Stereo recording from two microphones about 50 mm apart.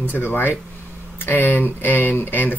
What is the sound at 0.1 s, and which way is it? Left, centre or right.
Speech, left.